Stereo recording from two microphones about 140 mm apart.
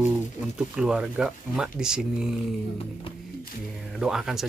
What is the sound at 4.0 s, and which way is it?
Speech, 5° right (ahead or behind).